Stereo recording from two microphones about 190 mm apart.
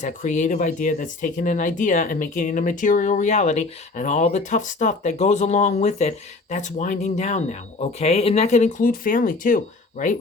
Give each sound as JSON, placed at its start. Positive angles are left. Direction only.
{"t": 0.0, "sound": "speech", "side_deg": 40}